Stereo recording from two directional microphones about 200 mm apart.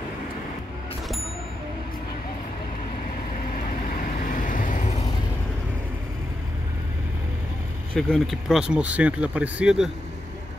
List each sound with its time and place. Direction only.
1.0 s ding: centre (ahead or behind)
3.9 s vehicle: 45° left (ahead or behind)
7.9 s speech: centre (ahead or behind)